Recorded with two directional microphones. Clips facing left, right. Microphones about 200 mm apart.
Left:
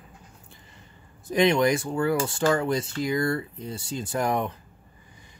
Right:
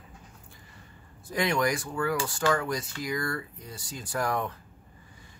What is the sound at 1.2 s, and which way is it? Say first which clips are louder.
Speech: left 6 dB; 20° left (ahead or behind).